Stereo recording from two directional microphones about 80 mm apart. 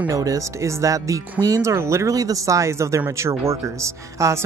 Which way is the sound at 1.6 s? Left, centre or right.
Right.